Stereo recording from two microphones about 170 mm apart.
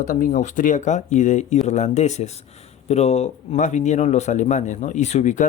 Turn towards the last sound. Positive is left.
turn(degrees=45)  # may be behind; listen again after turning